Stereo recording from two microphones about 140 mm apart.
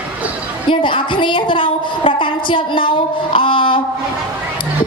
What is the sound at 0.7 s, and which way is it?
A woman's voice, 35° left (ahead or behind).